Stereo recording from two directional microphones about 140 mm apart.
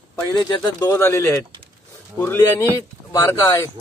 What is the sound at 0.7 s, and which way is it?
A man's voice, 20° left (ahead or behind).